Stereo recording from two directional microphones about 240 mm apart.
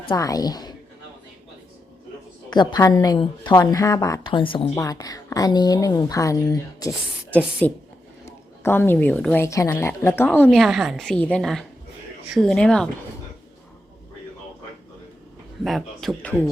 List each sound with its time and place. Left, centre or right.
0.0 s a woman's voice: centre
2.5 s a woman's voice: centre
15.6 s speech: centre